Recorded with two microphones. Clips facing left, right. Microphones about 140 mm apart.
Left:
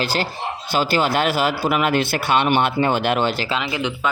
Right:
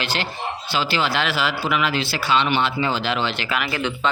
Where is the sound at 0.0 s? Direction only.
40° left (ahead or behind).